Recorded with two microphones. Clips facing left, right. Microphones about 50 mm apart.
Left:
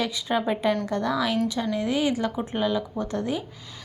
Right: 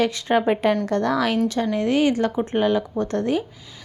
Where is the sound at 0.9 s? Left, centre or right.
Right.